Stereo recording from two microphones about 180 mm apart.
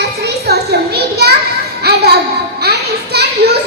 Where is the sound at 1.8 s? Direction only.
65° right (ahead or behind).